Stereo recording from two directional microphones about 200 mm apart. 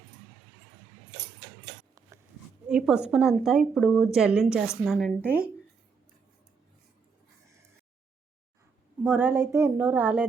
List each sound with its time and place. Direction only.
2.0 s a sound: 15° right (ahead or behind)
2.6 s a woman's voice: 5° right (ahead or behind)
9.0 s speech: 10° right (ahead or behind)